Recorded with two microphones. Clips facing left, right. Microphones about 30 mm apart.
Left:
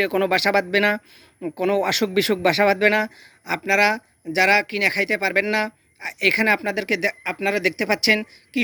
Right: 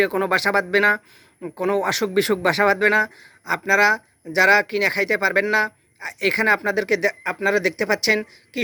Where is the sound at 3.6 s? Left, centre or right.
Left.